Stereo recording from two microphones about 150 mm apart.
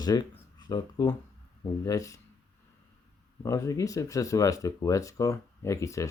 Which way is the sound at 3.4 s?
20° left (ahead or behind).